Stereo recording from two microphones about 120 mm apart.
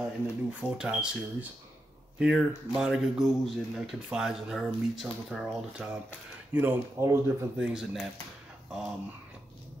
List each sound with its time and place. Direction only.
0.0 s speech: 10° right (ahead or behind)
7.5 s speech: 5° right (ahead or behind)